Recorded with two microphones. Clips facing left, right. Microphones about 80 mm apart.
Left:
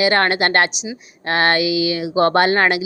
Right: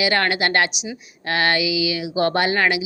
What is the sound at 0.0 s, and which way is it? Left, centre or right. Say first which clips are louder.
A woman's voice: left 4 dB; left.